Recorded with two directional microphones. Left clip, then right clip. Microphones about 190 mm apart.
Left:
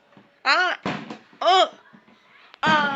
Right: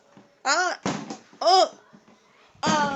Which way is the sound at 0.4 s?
20° right (ahead or behind).